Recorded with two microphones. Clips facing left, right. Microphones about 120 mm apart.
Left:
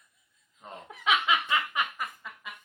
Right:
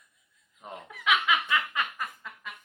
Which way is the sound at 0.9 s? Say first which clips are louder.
Even; 30° left (ahead or behind).